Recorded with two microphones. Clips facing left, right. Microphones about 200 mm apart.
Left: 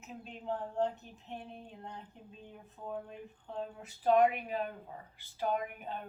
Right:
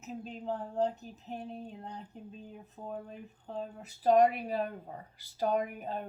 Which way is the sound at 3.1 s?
40° right (ahead or behind).